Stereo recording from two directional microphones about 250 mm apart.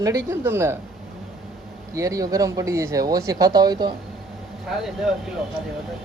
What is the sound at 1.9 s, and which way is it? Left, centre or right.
A woman's voice, centre.